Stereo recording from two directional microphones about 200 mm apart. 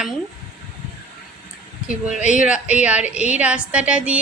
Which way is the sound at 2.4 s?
5° right (ahead or behind).